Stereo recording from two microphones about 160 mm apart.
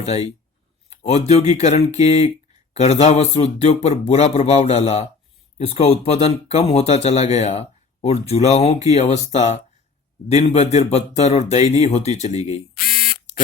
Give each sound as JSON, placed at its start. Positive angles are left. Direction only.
{"t": 0.0, "sound": "speech", "side_deg": 40}
{"t": 12.7, "sound": "camera", "side_deg": 65}